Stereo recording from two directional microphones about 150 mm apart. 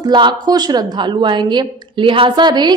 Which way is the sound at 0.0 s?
30° right (ahead or behind).